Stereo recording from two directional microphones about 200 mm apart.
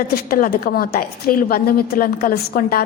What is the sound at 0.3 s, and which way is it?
A woman's voice, 45° left (ahead or behind).